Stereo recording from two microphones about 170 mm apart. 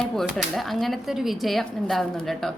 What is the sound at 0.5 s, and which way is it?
A woman's voice, centre (ahead or behind).